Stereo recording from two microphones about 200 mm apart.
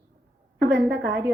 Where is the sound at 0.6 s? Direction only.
60° right (ahead or behind).